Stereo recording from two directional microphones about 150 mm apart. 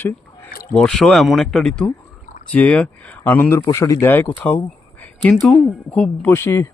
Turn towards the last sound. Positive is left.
turn(degrees=15)  # may be behind; listen again after turning